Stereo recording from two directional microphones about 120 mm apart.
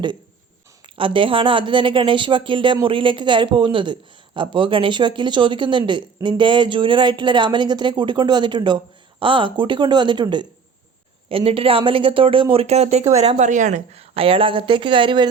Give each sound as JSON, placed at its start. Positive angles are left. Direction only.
{"t": 0.9, "sound": "speech", "side_deg": -45}